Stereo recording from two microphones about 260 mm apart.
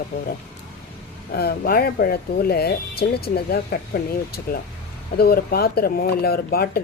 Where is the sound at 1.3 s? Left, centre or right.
Left.